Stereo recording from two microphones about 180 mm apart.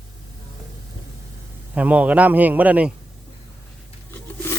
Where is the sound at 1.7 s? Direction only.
10° right (ahead or behind).